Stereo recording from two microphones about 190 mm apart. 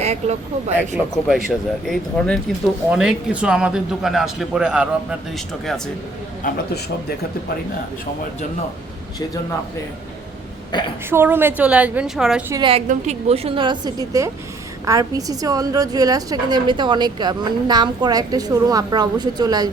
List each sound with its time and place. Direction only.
0.0 s speech: 35° right (ahead or behind)
0.8 s a man's voice: 5° right (ahead or behind)
10.7 s a woman's voice: 25° left (ahead or behind)
11.1 s a woman's voice: 10° right (ahead or behind)
12.5 s a woman's voice: 20° right (ahead or behind)
12.7 s a woman's voice: 35° right (ahead or behind)